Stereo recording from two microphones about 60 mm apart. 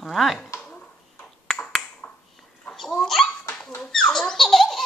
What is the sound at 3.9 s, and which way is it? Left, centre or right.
Baby laughter, centre.